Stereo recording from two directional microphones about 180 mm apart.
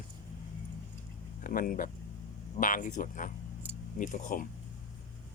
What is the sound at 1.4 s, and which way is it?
Speech, 50° left (ahead or behind).